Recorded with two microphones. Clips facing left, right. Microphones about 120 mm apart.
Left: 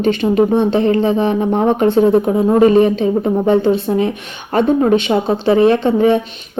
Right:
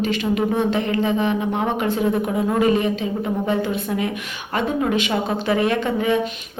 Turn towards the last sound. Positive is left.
turn(degrees=30)  # may be behind; listen again after turning